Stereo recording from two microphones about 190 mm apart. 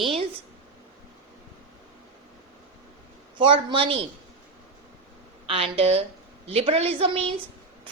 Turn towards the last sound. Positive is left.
turn(degrees=-30)  # may be behind; listen again after turning